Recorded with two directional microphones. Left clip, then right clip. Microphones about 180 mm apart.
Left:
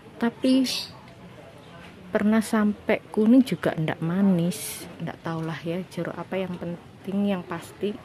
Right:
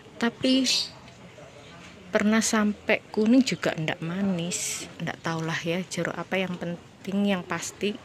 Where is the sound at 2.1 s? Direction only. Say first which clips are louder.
Even; 10° left (ahead or behind); by 4.8 s 30° left (ahead or behind).